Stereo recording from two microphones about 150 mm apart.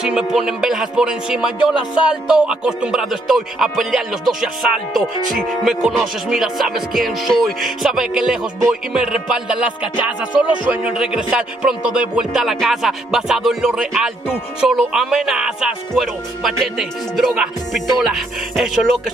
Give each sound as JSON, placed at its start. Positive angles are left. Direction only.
{"t": 0.0, "sound": "music", "side_deg": -5}